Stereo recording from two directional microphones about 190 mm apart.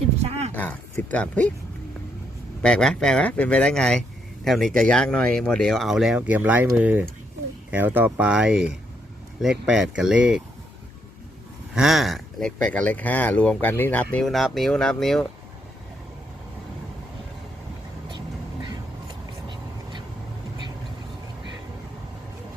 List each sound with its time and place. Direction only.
0.2 s a sound: 35° right (ahead or behind)
0.5 s speech: 10° left (ahead or behind)
2.6 s speech: 5° left (ahead or behind)
11.7 s speech: centre (ahead or behind)